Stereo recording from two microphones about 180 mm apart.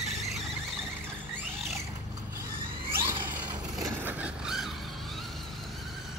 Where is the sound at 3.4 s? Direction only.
15° right (ahead or behind).